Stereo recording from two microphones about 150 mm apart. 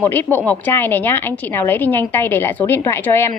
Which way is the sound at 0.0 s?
15° left (ahead or behind).